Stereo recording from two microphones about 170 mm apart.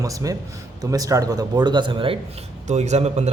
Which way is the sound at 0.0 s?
20° right (ahead or behind).